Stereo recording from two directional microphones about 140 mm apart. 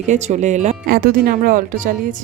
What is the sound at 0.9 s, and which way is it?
Speech, 90° right.